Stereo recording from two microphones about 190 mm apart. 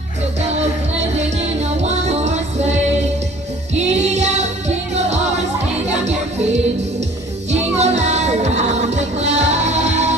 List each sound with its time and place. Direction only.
1.9 s music: 35° right (ahead or behind)
3.8 s music: 35° right (ahead or behind)
7.8 s music: 35° right (ahead or behind)